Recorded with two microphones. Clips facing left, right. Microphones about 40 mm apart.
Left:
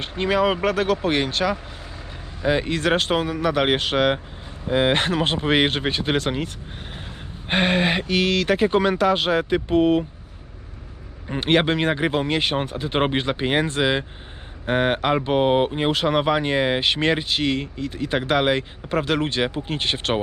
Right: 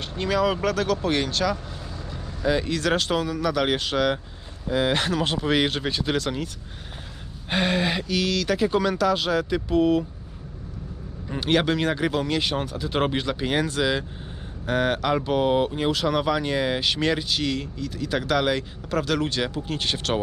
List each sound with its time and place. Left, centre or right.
0.0 s speech: left
11.3 s speech: left